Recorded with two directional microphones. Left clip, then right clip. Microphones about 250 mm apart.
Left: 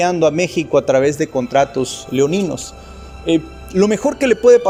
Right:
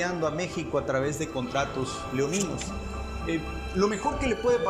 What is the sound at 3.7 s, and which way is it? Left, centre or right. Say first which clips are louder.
Speech: left 11 dB; left.